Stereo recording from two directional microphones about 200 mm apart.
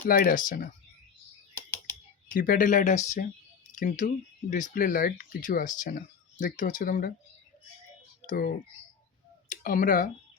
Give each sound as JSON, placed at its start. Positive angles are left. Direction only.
{"t": 0.0, "sound": "speech", "side_deg": 45}
{"t": 2.3, "sound": "speech", "side_deg": 45}
{"t": 8.3, "sound": "speech", "side_deg": 45}